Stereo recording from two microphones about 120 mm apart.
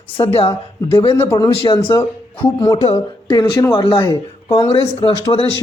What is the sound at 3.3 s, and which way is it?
Speech, 35° left (ahead or behind).